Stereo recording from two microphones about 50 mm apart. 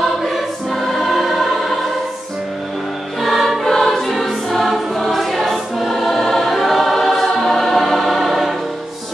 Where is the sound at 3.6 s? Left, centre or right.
Centre.